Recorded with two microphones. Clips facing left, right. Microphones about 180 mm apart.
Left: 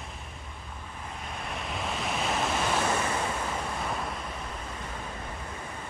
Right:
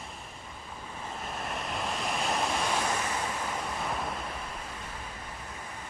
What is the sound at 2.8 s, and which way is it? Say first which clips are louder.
Waves: left 3 dB; 30° left (ahead or behind).